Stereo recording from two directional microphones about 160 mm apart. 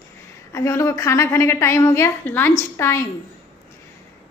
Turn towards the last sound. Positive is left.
turn(degrees=15)  # may be behind; listen again after turning